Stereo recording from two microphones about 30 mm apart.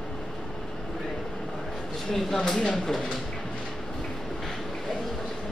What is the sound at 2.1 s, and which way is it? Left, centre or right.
Speech, centre.